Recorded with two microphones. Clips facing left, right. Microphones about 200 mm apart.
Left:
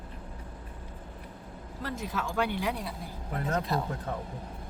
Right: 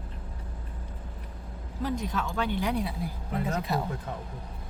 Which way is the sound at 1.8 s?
5° left (ahead or behind).